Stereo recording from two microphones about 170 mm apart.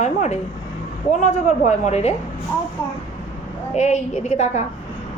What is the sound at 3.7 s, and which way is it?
Speech, 45° left (ahead or behind).